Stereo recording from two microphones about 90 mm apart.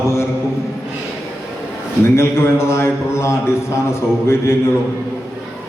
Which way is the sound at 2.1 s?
30° left (ahead or behind).